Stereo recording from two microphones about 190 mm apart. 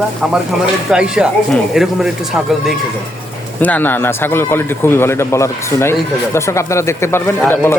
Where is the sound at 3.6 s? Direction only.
10° left (ahead or behind).